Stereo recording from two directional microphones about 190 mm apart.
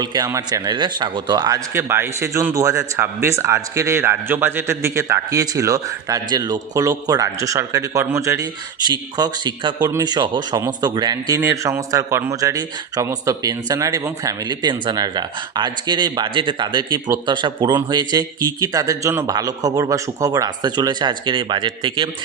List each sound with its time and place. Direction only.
0.0 s speech: 20° right (ahead or behind)